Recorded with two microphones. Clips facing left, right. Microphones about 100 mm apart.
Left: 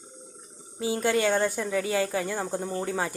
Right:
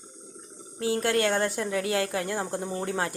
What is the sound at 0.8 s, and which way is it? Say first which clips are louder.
Speech: even; centre (ahead or behind).